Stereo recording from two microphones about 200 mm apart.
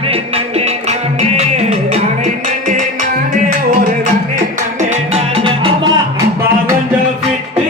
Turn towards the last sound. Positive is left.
turn(degrees=-25)  # may be behind; listen again after turning